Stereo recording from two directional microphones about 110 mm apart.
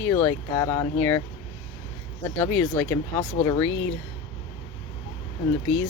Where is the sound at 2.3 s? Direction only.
15° left (ahead or behind).